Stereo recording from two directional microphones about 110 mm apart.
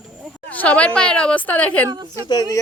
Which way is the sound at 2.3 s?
35° left (ahead or behind).